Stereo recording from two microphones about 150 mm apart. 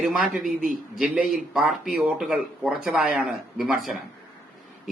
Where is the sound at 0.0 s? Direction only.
5° right (ahead or behind).